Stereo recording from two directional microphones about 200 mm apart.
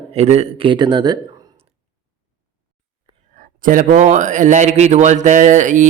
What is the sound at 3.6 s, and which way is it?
A man's voice, 40° right (ahead or behind).